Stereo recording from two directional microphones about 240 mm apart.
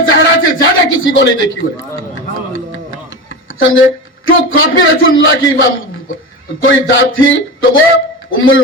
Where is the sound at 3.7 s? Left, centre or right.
Left.